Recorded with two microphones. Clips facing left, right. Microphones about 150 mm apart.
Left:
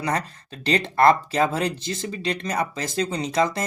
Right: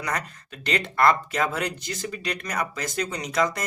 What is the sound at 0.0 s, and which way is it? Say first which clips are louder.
Speech: left 4 dB; 30° left (ahead or behind).